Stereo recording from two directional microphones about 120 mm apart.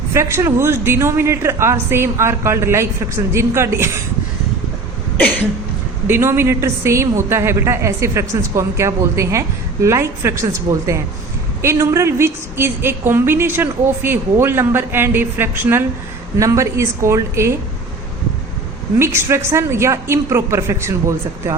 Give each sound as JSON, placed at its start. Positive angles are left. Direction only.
{"t": 0.1, "sound": "a woman's voice", "side_deg": -25}
{"t": 6.1, "sound": "a woman's voice", "side_deg": -20}
{"t": 18.9, "sound": "a woman's voice", "side_deg": -20}